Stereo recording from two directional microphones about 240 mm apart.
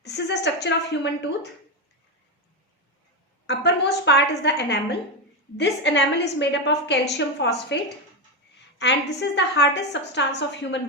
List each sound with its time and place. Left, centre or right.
0.0 s a woman's voice: left
3.4 s a woman's voice: left